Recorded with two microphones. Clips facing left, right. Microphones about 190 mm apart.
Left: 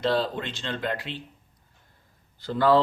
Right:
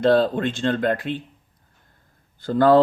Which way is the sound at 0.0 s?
50° right (ahead or behind).